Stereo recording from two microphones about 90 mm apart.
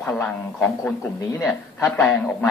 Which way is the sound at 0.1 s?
15° left (ahead or behind).